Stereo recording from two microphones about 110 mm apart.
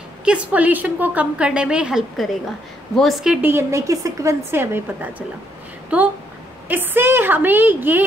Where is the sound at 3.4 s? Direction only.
20° right (ahead or behind).